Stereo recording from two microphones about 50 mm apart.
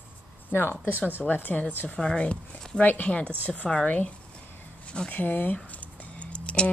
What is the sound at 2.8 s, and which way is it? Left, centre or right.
Speech, left.